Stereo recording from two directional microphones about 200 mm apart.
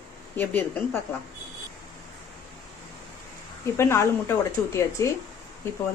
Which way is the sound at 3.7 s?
15° left (ahead or behind).